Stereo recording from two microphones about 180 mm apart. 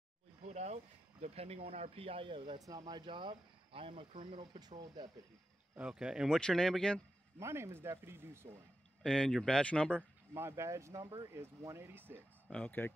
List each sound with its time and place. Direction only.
0.5 s speech: 35° right (ahead or behind)
5.8 s speech: 5° right (ahead or behind)
7.3 s speech: 15° right (ahead or behind)
9.0 s speech: 5° left (ahead or behind)
9.9 s speech: 15° right (ahead or behind)
12.4 s speech: 5° left (ahead or behind)